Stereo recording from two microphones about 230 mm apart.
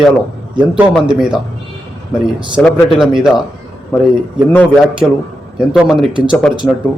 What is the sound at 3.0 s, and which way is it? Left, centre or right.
Speech, centre.